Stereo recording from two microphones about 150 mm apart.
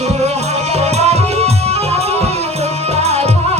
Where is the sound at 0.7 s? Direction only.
45° right (ahead or behind).